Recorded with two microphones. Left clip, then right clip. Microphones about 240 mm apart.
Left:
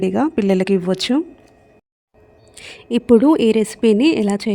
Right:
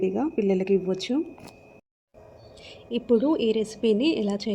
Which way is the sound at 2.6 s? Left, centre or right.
Left.